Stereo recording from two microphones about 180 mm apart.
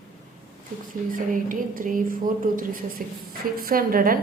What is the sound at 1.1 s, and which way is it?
A woman's voice, 50° right (ahead or behind).